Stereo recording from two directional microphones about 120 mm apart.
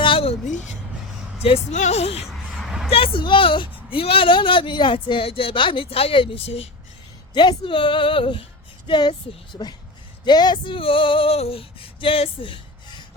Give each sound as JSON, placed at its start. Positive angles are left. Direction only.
{"t": 0.0, "sound": "a sound", "side_deg": 50}
{"t": 1.4, "sound": "a woman's voice", "side_deg": 55}
{"t": 2.6, "sound": "a sound", "side_deg": -5}
{"t": 2.9, "sound": "speech", "side_deg": 45}
{"t": 7.3, "sound": "speech", "side_deg": 40}
{"t": 10.2, "sound": "female singing", "side_deg": 35}